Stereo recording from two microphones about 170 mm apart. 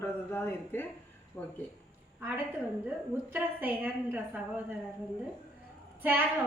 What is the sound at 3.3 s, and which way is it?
A woman's voice, 10° right (ahead or behind).